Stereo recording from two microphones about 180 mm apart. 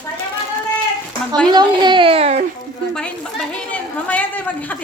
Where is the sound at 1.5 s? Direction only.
25° right (ahead or behind).